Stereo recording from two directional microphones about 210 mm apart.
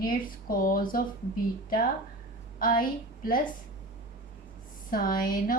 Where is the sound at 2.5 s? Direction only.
45° left (ahead or behind).